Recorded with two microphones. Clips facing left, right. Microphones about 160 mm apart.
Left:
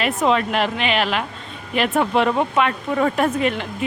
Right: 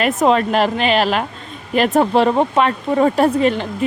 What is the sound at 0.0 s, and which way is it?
Speech, 45° right (ahead or behind).